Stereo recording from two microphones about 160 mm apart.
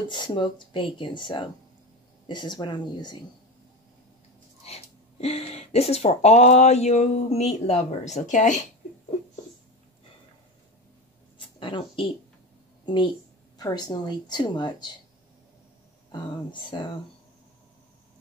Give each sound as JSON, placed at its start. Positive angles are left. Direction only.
{"t": 0.1, "sound": "a woman's voice", "side_deg": 30}
{"t": 4.6, "sound": "speech", "side_deg": 40}
{"t": 11.3, "sound": "a sound", "side_deg": 30}
{"t": 12.8, "sound": "a woman's voice", "side_deg": 30}
{"t": 16.1, "sound": "a woman's voice", "side_deg": 30}